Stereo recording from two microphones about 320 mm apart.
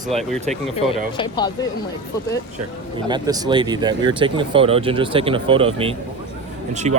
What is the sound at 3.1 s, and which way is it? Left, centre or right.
Speech, centre.